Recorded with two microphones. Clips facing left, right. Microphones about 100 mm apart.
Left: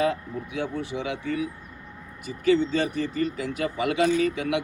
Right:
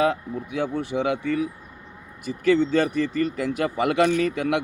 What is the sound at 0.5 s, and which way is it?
Speech, 60° right (ahead or behind).